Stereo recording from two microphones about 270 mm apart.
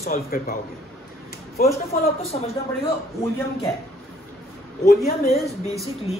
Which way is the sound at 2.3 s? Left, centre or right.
Left.